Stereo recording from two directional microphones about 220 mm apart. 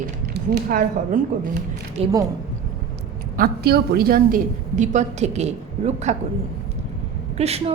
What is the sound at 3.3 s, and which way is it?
A woman's voice, 45° right (ahead or behind).